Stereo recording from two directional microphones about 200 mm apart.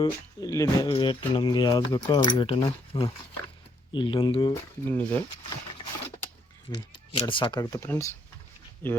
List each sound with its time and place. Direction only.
0.0 s speech: 15° left (ahead or behind)
4.9 s speech: 10° left (ahead or behind)
6.7 s speech: 25° left (ahead or behind)